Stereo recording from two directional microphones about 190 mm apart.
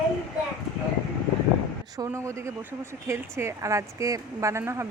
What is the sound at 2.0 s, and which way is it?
Speech, 15° right (ahead or behind).